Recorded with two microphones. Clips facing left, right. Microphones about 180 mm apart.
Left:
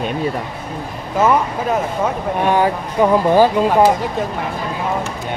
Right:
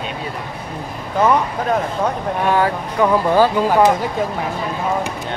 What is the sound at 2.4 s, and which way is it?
Speech, 20° left (ahead or behind).